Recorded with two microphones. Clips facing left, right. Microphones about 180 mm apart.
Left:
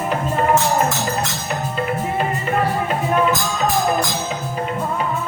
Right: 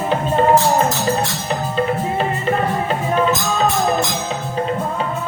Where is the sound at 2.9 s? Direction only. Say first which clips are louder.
Right 1 dB; 30° right (ahead or behind).